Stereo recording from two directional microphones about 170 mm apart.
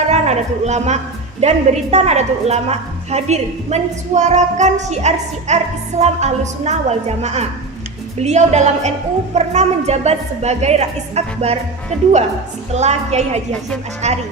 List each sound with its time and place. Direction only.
0.1 s a woman's voice: 40° right (ahead or behind)
12.7 s a woman's voice: 40° right (ahead or behind)